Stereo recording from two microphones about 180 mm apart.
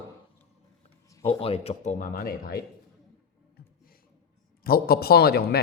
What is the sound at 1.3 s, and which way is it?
Speech, 30° left (ahead or behind).